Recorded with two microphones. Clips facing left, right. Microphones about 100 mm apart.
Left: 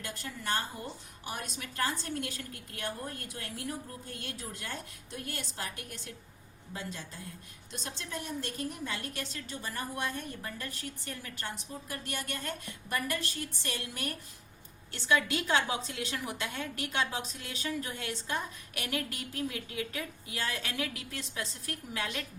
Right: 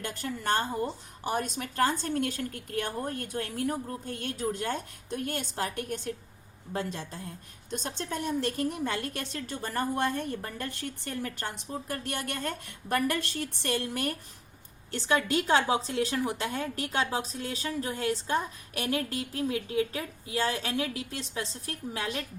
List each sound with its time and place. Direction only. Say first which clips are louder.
0.0 s a woman's voice: right 6 dB; 45° right (ahead or behind)
7.7 s a woman's voice: right 7 dB; 45° right (ahead or behind)
8.9 s a woman's voice: right 5 dB; 45° right (ahead or behind)